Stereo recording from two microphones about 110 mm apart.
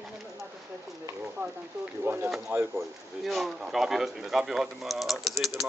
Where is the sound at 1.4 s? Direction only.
20° right (ahead or behind).